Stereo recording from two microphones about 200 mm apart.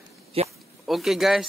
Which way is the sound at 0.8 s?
Centre (ahead or behind).